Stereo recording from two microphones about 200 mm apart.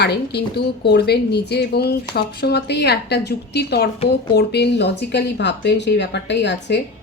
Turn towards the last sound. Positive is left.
turn(degrees=60)  # may be behind; listen again after turning